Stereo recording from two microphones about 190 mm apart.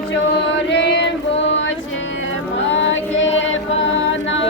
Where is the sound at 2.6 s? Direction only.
75° left (ahead or behind).